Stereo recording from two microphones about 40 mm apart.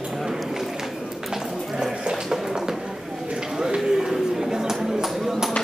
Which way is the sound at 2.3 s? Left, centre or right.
Centre.